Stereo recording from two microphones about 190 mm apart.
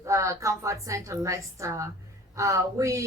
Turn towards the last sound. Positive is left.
turn(degrees=-15)  # may be behind; listen again after turning